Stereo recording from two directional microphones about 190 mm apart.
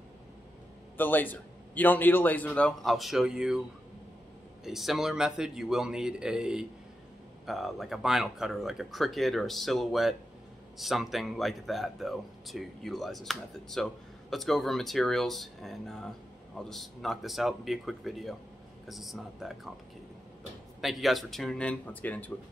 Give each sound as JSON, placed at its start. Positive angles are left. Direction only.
{"t": 0.9, "sound": "a man's voice", "side_deg": 10}
{"t": 4.6, "sound": "speech", "side_deg": 0}
{"t": 20.8, "sound": "speech", "side_deg": 0}